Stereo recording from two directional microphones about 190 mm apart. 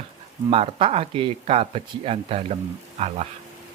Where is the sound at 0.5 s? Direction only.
30° right (ahead or behind).